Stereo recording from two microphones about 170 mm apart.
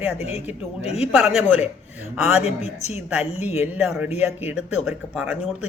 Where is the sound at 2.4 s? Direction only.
40° left (ahead or behind).